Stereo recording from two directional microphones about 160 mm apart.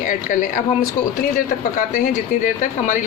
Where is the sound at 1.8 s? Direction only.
55° left (ahead or behind).